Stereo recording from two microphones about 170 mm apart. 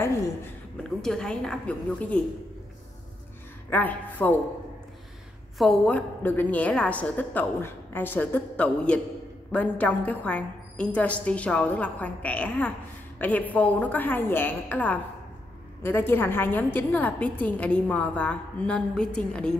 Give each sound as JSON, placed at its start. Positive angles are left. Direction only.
{"t": 0.8, "sound": "a woman's voice", "side_deg": 5}
{"t": 3.7, "sound": "a woman's voice", "side_deg": 10}
{"t": 5.6, "sound": "a woman's voice", "side_deg": 5}